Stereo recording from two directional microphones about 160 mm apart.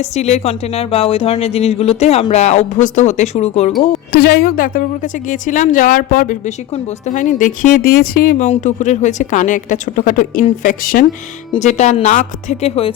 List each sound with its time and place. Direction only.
0.2 s a woman's voice: 45° left (ahead or behind)
4.1 s speech: 70° left (ahead or behind)
8.4 s a woman's voice: 50° left (ahead or behind)
11.6 s a woman's voice: 45° left (ahead or behind)